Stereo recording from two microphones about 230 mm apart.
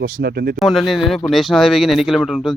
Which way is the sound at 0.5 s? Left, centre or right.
Centre.